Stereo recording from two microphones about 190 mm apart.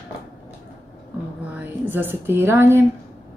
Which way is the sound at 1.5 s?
10° right (ahead or behind).